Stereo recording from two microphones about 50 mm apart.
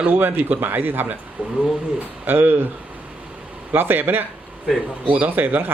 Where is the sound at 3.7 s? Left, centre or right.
Right.